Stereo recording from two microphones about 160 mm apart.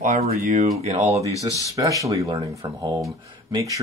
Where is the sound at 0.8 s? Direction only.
40° right (ahead or behind).